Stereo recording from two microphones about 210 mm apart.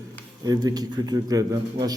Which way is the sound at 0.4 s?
20° right (ahead or behind).